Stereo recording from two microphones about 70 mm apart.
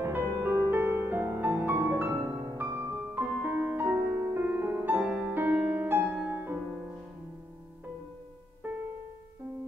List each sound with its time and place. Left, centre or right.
0.1 s music: right
5.6 s music: centre
5.9 s music: right
8.6 s music: right